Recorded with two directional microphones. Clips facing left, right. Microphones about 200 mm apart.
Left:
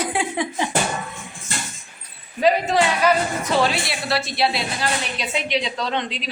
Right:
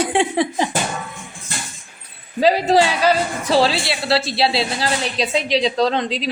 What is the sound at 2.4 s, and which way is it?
A woman's voice, 30° right (ahead or behind).